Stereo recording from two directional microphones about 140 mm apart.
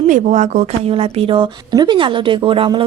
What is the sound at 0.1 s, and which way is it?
Speech, 60° right (ahead or behind).